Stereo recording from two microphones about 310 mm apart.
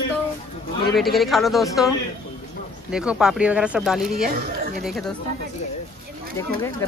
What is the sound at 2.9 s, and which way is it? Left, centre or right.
Speech, centre.